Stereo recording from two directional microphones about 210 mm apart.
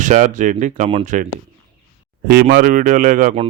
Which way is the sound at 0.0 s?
35° right (ahead or behind).